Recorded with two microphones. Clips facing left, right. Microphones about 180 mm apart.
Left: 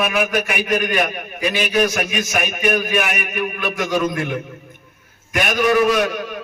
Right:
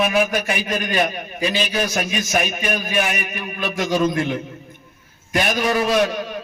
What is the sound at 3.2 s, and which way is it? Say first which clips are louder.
Speech: left 3 dB; 55° left (ahead or behind).